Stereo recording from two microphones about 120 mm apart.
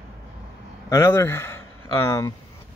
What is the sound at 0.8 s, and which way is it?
Speech, 25° left (ahead or behind).